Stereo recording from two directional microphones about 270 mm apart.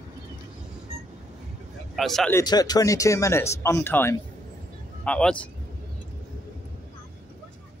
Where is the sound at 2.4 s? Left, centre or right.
Centre.